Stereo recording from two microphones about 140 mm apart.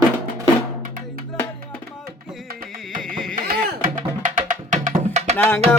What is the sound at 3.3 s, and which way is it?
Music, 75° right (ahead or behind).